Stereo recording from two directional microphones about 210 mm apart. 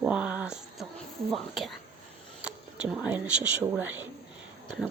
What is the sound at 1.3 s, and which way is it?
Speech, centre (ahead or behind).